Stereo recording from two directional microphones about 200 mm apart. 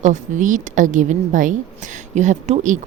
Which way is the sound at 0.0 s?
40° right (ahead or behind).